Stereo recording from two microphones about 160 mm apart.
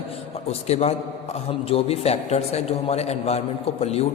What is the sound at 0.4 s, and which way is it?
A man's voice, 40° left (ahead or behind).